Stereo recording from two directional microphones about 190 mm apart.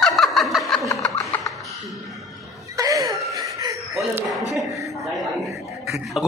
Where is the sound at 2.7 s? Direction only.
20° right (ahead or behind).